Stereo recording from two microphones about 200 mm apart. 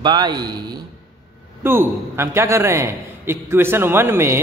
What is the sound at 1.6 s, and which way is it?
A man's voice, 10° right (ahead or behind).